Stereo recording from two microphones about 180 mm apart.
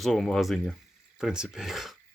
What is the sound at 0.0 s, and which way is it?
Speech, centre (ahead or behind).